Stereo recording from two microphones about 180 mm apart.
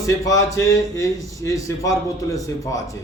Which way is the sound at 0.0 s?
20° left (ahead or behind).